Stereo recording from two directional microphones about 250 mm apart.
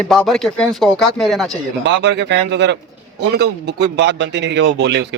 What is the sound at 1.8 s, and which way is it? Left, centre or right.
A man's voice, right.